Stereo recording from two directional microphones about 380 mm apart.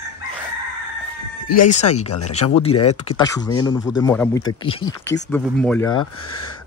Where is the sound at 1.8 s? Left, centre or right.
Left.